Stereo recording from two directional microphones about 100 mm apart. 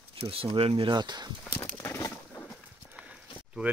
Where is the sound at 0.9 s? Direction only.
45° right (ahead or behind).